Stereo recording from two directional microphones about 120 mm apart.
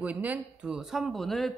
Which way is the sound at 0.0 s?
10° right (ahead or behind).